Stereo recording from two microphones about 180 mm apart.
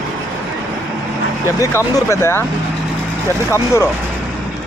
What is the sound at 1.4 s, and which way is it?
Speech, 15° left (ahead or behind).